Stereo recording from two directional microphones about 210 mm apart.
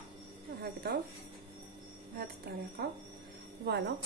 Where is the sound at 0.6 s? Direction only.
50° right (ahead or behind).